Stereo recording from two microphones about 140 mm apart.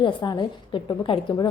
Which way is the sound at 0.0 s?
30° left (ahead or behind).